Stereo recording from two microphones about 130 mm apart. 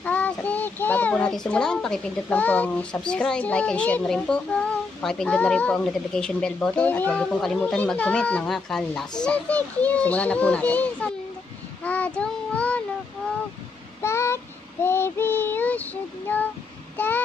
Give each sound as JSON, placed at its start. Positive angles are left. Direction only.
{"t": 0.0, "sound": "child singing", "side_deg": 10}
{"t": 1.5, "sound": "a woman's voice", "side_deg": 5}
{"t": 11.8, "sound": "child singing", "side_deg": 10}
{"t": 14.0, "sound": "child singing", "side_deg": 20}
{"t": 16.9, "sound": "a sound", "side_deg": 15}